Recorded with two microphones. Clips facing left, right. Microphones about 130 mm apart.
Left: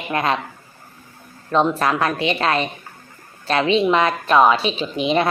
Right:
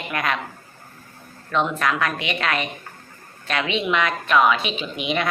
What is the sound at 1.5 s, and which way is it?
A woman's voice, 35° left (ahead or behind).